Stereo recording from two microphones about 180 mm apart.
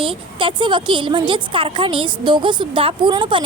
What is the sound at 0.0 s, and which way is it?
A woman's voice, 30° right (ahead or behind).